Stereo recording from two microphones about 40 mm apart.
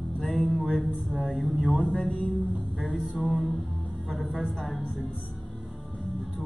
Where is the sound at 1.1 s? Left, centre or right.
Centre.